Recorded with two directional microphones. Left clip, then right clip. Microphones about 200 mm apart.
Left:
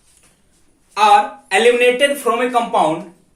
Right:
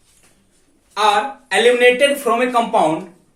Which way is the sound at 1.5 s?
30° left (ahead or behind).